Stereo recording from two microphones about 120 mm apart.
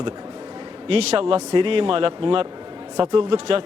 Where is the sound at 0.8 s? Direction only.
55° right (ahead or behind).